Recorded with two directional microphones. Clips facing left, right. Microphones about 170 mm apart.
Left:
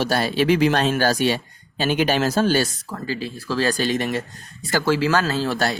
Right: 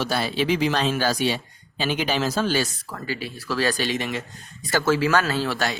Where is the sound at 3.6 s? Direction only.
40° left (ahead or behind).